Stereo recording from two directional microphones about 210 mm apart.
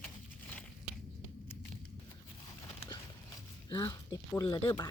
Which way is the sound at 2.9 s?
20° left (ahead or behind).